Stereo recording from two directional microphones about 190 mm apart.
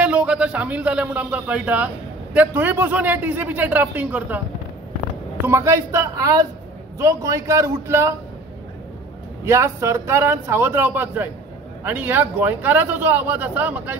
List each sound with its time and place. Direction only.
0.0 s a man's voice: 5° right (ahead or behind)
5.5 s a man's voice: 15° right (ahead or behind)
9.4 s a man's voice: 15° right (ahead or behind)